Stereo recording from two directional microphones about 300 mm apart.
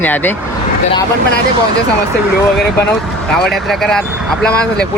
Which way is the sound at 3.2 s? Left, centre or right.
Centre.